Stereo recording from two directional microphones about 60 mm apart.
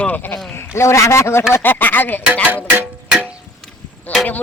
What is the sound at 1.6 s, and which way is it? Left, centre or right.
Speech, left.